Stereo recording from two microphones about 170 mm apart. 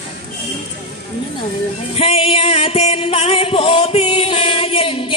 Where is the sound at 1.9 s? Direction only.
35° left (ahead or behind).